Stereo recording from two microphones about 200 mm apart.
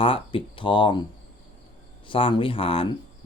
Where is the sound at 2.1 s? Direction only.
25° left (ahead or behind).